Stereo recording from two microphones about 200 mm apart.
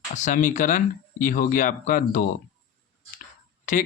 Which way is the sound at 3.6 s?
40° left (ahead or behind).